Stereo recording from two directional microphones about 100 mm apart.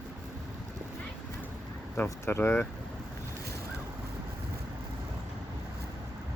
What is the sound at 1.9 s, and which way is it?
Speech, 20° left (ahead or behind).